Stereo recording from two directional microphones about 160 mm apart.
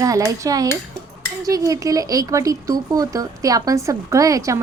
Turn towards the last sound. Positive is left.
turn(degrees=-20)  # may be behind; listen again after turning